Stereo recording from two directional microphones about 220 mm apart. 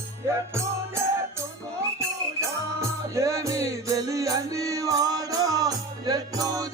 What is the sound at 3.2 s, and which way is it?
Music, 15° right (ahead or behind).